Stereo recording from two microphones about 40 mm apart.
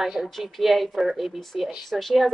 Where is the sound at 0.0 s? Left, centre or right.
Centre.